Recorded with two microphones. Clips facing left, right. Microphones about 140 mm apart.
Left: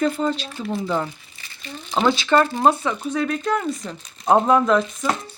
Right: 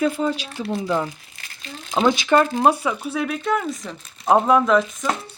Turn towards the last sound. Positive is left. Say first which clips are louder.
# even
turn(degrees=0)  # may be behind; listen again after turning